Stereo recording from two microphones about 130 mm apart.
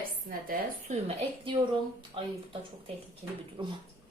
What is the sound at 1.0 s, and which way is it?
A woman's voice, 40° right (ahead or behind).